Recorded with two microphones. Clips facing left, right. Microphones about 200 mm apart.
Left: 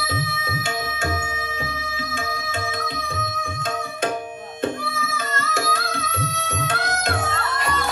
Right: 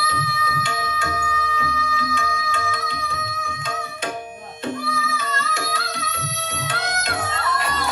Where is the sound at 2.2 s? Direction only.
50° left (ahead or behind).